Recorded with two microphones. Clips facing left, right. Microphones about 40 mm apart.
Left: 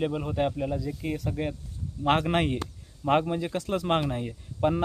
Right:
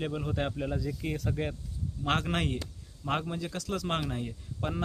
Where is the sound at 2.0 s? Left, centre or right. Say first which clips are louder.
Left 6 dB; left.